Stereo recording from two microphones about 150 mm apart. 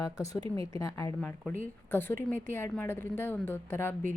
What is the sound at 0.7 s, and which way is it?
A woman's voice, 20° left (ahead or behind).